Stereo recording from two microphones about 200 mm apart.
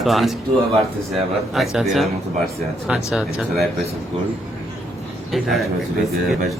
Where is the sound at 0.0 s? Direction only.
Centre (ahead or behind).